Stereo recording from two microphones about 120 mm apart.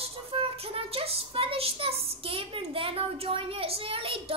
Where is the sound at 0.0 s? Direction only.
55° right (ahead or behind).